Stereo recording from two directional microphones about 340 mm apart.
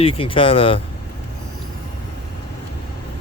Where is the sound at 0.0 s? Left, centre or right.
Centre.